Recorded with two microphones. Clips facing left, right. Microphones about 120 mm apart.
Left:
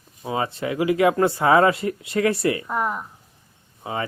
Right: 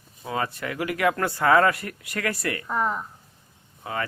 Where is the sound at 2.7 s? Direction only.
5° left (ahead or behind).